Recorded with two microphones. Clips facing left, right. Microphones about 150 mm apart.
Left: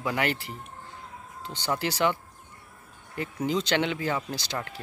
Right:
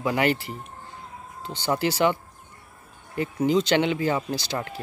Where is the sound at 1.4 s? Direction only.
5° right (ahead or behind).